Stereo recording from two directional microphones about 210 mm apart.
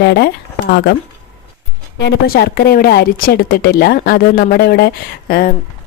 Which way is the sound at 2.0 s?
50° left (ahead or behind).